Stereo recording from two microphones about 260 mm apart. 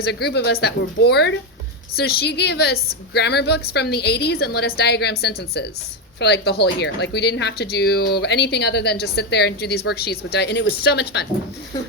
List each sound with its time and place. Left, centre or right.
0.0 s speech: left